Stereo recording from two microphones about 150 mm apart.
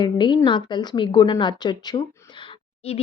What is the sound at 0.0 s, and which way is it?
Speech, 30° left (ahead or behind).